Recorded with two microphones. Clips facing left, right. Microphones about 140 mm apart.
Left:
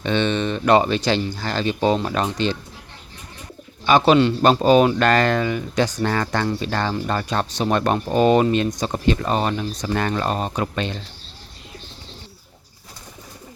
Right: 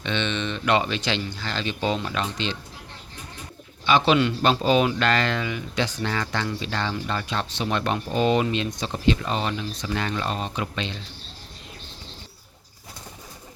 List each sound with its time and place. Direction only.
0.0 s speech: 40° left (ahead or behind)
3.8 s speech: 45° left (ahead or behind)